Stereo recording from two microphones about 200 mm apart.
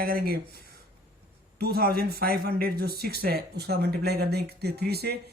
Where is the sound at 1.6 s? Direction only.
50° right (ahead or behind).